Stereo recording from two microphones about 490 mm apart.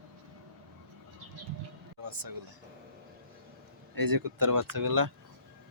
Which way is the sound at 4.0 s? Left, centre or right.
Right.